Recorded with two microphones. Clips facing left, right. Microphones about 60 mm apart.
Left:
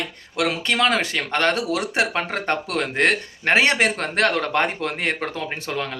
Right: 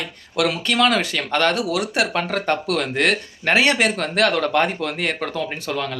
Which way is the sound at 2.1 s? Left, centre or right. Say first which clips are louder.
Right 2 dB; left.